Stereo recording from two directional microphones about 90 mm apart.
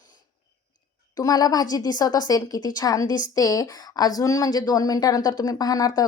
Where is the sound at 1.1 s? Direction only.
45° left (ahead or behind).